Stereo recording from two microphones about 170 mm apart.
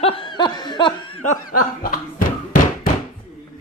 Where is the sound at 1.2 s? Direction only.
50° left (ahead or behind).